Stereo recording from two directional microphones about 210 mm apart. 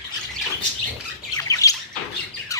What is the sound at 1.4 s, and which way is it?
Bird, 15° left (ahead or behind).